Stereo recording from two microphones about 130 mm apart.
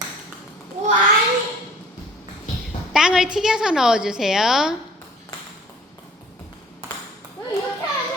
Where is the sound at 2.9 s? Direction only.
5° right (ahead or behind).